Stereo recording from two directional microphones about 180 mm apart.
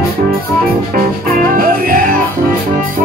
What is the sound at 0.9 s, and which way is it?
Music, 55° right (ahead or behind).